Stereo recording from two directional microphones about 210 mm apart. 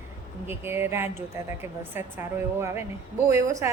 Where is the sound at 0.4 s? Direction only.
10° right (ahead or behind).